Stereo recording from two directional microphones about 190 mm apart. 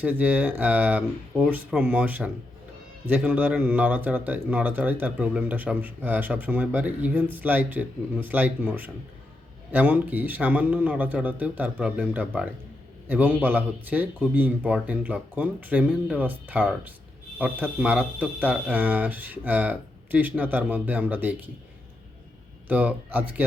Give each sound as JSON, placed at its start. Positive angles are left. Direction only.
{"t": 0.0, "sound": "speech", "side_deg": -10}
{"t": 22.7, "sound": "speech", "side_deg": -10}